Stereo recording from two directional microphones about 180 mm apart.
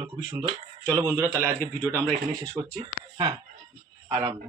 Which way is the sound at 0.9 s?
15° right (ahead or behind).